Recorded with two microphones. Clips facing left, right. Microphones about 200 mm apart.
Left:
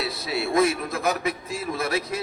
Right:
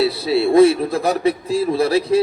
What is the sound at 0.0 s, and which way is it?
A man's voice, 30° right (ahead or behind).